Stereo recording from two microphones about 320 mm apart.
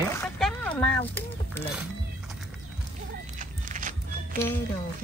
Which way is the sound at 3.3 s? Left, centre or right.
Right.